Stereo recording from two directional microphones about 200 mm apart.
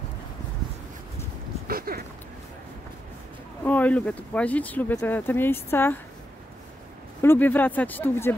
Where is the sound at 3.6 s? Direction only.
10° left (ahead or behind).